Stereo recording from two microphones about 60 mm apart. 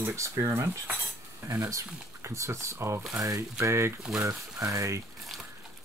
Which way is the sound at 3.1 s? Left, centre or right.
Right.